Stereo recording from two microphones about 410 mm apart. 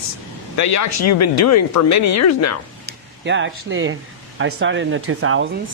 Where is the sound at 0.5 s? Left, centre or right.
Left.